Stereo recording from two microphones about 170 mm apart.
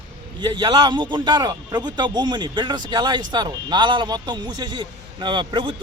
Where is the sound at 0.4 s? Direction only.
25° right (ahead or behind).